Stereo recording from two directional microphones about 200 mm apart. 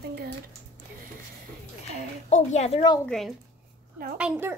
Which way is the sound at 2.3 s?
35° left (ahead or behind).